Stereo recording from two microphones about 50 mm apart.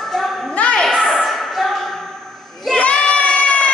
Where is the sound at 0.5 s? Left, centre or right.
Left.